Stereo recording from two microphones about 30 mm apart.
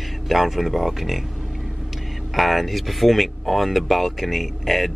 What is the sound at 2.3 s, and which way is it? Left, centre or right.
Speech, centre.